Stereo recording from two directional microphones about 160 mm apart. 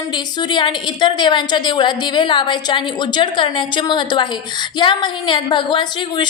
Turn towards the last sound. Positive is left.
turn(degrees=30)  # may be behind; listen again after turning